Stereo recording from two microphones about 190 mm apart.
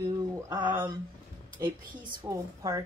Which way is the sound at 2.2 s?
15° right (ahead or behind).